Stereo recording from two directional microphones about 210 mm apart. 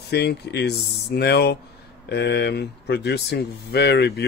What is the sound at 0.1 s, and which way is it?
Speech, 50° left (ahead or behind).